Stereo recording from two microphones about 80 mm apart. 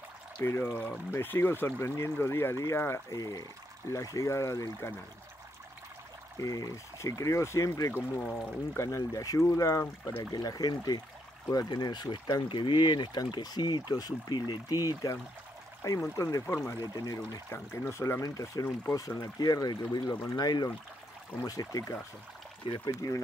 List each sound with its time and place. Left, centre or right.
0.4 s speech: left
3.1 s speech: left
6.3 s speech: left
8.2 s speech: centre
8.7 s speech: left
10.1 s speech: left
12.4 s speech: left
13.3 s speech: left
17.5 s speech: left
22.7 s speech: left
23.0 s speech: left